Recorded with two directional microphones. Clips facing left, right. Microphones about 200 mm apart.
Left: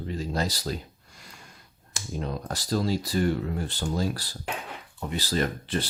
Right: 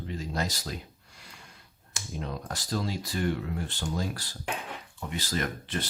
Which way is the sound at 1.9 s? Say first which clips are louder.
Left 4 dB; 35° left (ahead or behind).